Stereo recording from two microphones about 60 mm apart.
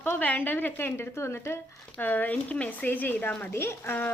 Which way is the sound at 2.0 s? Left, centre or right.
Left.